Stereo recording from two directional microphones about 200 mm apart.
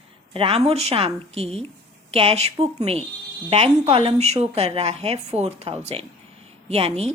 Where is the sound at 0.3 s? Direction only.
30° right (ahead or behind).